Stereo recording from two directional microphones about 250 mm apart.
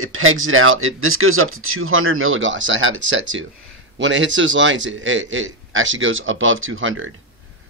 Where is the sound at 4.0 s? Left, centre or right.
Right.